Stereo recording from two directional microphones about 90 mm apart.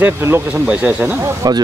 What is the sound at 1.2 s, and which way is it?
Speech, 40° right (ahead or behind).